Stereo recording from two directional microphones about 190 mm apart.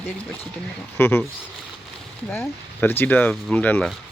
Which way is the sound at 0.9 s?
10° left (ahead or behind).